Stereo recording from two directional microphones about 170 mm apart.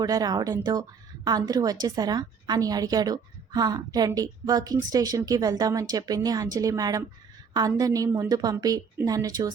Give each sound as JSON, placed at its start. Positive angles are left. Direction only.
{"t": 0.0, "sound": "speech", "side_deg": -20}